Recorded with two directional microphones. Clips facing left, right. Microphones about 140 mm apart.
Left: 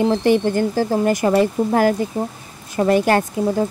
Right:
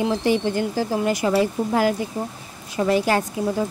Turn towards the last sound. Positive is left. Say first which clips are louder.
# left 4 dB
turn(degrees=55)  # may be behind; listen again after turning